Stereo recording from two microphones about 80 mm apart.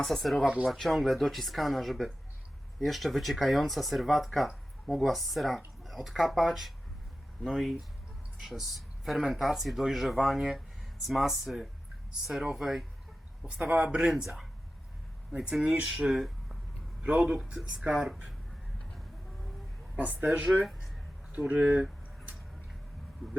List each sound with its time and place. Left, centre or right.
0.0 s speech: centre
0.4 s speech: centre
0.7 s speech: centre
13.4 s speech: centre
14.1 s speech: centre
20.2 s speech: centre
20.7 s a sound: centre
21.3 s speech: centre